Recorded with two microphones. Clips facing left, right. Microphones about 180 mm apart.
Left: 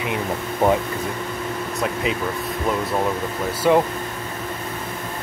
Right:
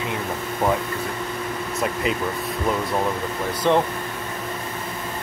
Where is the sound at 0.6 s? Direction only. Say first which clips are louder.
Left 4 dB; 20° left (ahead or behind).